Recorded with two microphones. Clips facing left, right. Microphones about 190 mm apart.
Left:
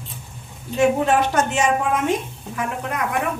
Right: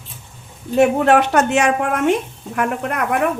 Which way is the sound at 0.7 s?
65° right (ahead or behind).